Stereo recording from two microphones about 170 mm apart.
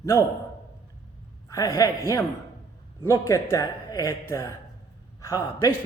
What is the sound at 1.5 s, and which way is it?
A man's voice, 20° left (ahead or behind).